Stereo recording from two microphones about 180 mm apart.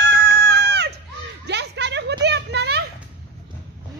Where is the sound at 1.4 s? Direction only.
70° right (ahead or behind).